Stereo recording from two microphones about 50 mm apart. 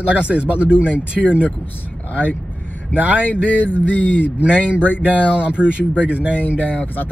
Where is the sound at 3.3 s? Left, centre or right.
Left.